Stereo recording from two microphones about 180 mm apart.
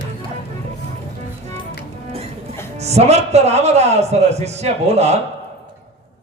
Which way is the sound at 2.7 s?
35° right (ahead or behind).